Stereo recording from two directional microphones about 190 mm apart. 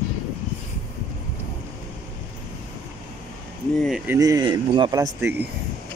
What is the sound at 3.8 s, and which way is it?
Speech, centre (ahead or behind).